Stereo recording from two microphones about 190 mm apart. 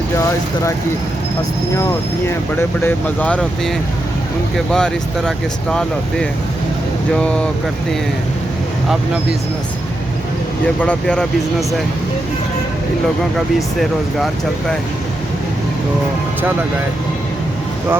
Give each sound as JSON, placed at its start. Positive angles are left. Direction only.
{"t": 1.7, "sound": "speech", "side_deg": 15}
{"t": 7.2, "sound": "speech", "side_deg": 5}
{"t": 10.8, "sound": "speech", "side_deg": 5}